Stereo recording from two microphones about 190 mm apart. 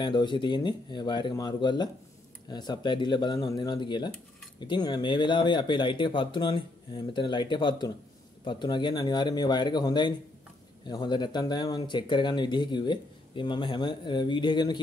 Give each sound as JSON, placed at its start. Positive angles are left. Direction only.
{"t": 0.0, "sound": "speech", "side_deg": 25}